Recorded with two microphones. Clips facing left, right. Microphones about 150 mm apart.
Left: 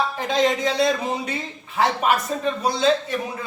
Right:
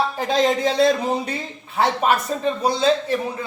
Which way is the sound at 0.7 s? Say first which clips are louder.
Right 3 dB; 35° right (ahead or behind).